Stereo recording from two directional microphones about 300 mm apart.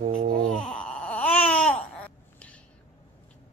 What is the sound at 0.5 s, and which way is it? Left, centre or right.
Baby cry, centre.